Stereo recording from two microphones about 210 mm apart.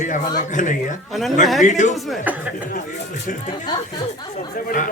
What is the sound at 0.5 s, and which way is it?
A woman's voice, 40° left (ahead or behind).